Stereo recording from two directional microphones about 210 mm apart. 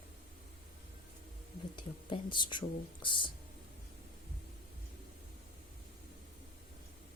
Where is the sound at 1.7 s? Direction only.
20° left (ahead or behind).